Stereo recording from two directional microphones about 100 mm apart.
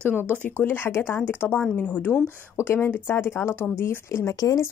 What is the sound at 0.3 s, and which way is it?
Speech, 20° left (ahead or behind).